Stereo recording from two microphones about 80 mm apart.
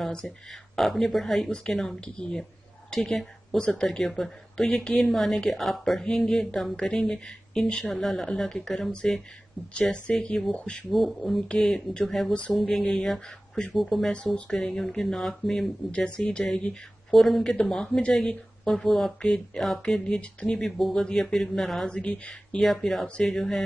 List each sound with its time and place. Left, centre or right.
0.0 s a woman's voice: centre
10.9 s speech: centre
21.9 s speech: centre